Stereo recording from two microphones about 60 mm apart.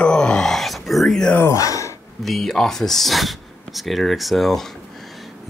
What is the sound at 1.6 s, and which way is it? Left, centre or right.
Gasp, left.